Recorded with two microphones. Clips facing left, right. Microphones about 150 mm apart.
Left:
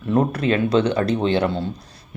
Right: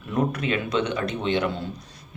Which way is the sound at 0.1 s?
35° left (ahead or behind).